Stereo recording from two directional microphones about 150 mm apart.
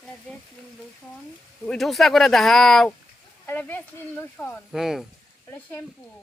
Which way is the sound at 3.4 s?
15° left (ahead or behind).